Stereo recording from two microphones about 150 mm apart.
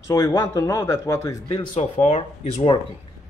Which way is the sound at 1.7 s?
45° left (ahead or behind).